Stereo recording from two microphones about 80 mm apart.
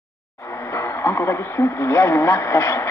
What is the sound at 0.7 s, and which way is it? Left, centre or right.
Speech, left.